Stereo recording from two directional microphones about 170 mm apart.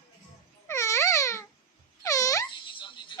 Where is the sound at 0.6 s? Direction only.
15° left (ahead or behind).